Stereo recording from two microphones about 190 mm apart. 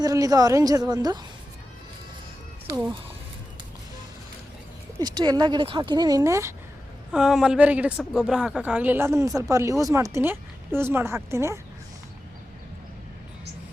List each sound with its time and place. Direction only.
0.0 s speech: 20° right (ahead or behind)
4.9 s speech: 20° right (ahead or behind)
7.1 s a woman's voice: 5° right (ahead or behind)